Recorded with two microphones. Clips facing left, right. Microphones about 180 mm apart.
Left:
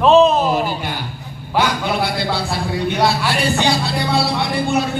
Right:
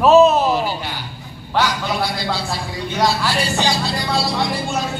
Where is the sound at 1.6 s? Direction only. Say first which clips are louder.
Left 4 dB; 55° left (ahead or behind).